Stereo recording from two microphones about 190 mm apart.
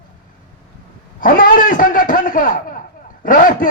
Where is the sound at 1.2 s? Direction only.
45° left (ahead or behind).